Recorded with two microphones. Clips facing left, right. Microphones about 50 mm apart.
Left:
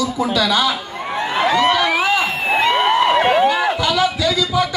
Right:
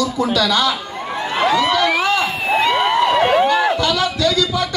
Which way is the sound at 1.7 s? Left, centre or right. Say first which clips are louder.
Even; centre.